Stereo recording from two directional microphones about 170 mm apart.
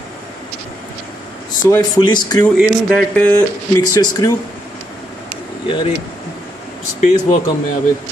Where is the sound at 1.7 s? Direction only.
25° left (ahead or behind).